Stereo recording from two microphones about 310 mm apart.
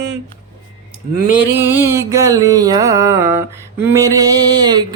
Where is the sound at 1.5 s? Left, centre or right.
Centre.